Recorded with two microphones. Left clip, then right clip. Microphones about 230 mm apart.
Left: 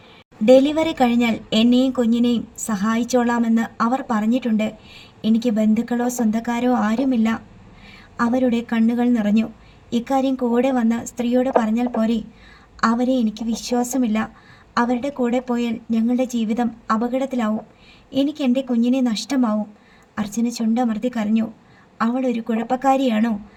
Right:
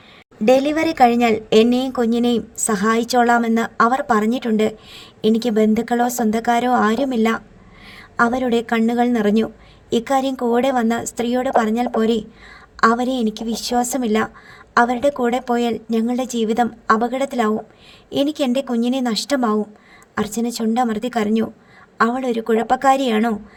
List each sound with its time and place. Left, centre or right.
0.4 s a woman's voice: right